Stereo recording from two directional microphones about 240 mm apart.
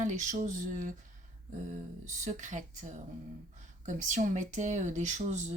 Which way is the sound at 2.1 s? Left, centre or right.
Right.